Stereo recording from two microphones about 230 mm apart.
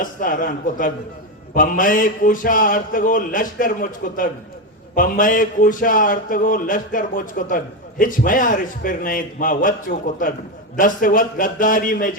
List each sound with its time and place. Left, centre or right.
0.0 s a man's voice: left